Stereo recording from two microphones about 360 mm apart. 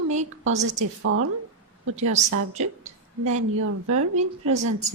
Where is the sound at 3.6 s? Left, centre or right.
Right.